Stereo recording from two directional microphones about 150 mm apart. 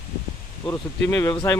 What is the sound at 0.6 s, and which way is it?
Speech, 20° left (ahead or behind).